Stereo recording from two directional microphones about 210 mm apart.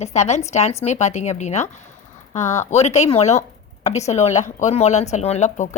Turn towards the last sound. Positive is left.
turn(degrees=35)  # may be behind; listen again after turning